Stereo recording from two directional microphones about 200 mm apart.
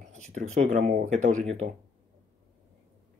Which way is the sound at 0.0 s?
35° right (ahead or behind).